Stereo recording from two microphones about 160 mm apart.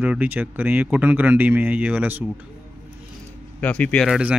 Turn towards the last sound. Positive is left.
turn(degrees=10)  # may be behind; listen again after turning